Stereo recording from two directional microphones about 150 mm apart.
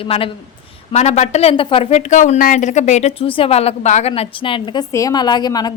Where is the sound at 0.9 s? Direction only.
50° left (ahead or behind).